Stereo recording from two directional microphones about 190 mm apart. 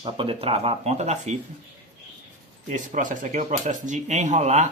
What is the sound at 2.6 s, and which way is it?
Speech, 40° right (ahead or behind).